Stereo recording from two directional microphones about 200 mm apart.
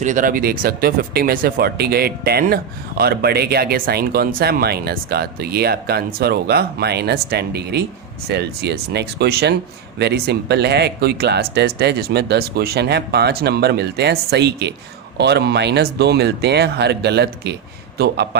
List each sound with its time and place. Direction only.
0.0 s a man's voice: 40° right (ahead or behind)